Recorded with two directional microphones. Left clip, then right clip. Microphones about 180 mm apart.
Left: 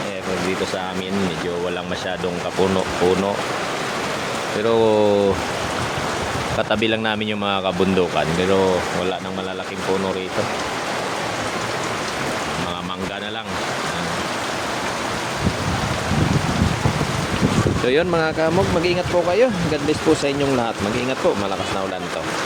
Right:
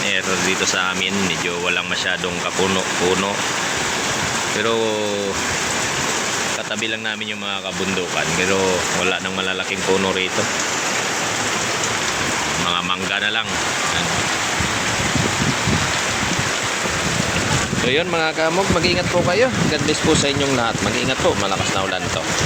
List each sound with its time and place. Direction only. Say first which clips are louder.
17.8 s speech: left 1 dB; 30° left (ahead or behind)